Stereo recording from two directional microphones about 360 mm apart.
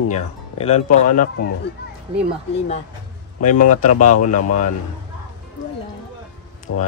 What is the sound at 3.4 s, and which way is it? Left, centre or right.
Speech, left.